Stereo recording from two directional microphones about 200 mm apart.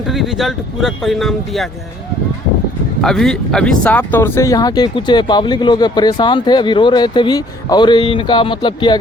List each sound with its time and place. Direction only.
0.1 s speech: centre (ahead or behind)
3.0 s speech: centre (ahead or behind); by 9.0 s 25° left (ahead or behind)